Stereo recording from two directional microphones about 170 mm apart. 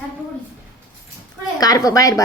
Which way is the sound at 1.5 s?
20° left (ahead or behind).